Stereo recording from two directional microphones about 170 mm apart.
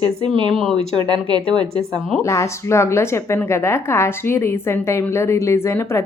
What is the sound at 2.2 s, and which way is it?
A woman's voice, 15° left (ahead or behind).